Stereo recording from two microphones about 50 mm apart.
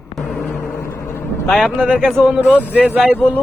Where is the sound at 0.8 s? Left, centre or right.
Left.